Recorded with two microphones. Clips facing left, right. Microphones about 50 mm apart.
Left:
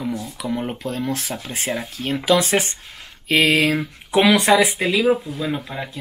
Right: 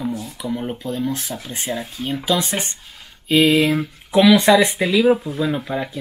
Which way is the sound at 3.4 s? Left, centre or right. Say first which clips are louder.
Right 2 dB; left.